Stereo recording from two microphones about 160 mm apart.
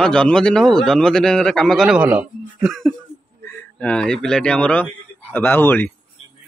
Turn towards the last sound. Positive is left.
turn(degrees=10)  # may be behind; listen again after turning